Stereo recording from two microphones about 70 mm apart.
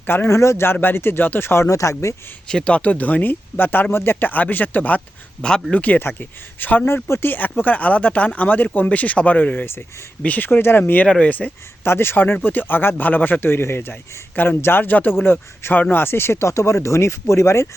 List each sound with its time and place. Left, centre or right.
0.0 s a man's voice: left
0.3 s speech: left
2.5 s speech: centre
6.8 s speech: left
11.0 s speech: centre; by 17.7 s left